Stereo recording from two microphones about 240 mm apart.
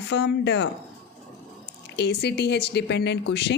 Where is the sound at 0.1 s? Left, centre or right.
Left.